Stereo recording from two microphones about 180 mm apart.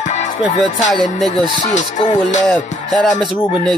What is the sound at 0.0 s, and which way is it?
Music, 40° left (ahead or behind).